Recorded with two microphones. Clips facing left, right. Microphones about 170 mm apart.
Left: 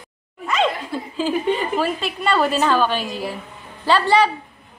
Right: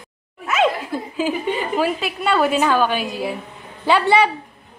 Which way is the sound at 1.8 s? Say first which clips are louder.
Right 2 dB; 5° right (ahead or behind).